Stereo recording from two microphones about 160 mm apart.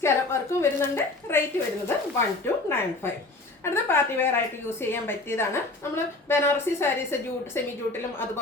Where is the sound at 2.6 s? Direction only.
15° left (ahead or behind).